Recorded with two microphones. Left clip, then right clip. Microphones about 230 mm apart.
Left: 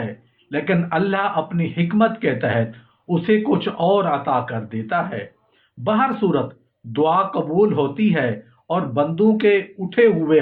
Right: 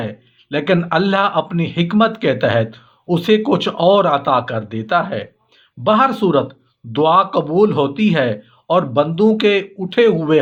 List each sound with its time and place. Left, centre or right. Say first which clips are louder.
0.5 s speech: right 5 dB; right